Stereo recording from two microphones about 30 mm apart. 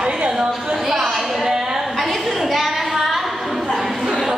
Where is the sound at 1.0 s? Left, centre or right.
Centre.